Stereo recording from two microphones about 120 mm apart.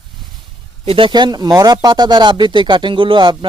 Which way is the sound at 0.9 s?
45° right (ahead or behind).